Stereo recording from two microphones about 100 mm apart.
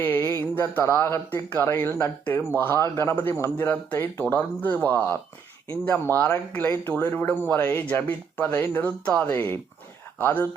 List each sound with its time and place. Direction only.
0.0 s mantra: 20° left (ahead or behind)
0.7 s speech: 20° left (ahead or behind)